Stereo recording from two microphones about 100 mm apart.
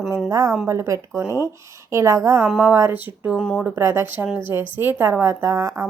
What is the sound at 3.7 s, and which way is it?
A woman's voice, 25° right (ahead or behind).